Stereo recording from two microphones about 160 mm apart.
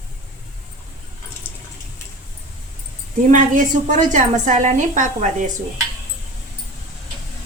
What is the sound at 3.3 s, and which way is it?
A woman's voice, 50° right (ahead or behind).